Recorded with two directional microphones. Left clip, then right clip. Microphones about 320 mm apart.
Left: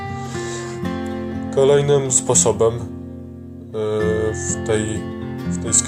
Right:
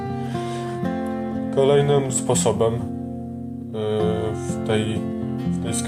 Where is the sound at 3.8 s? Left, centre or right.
Centre.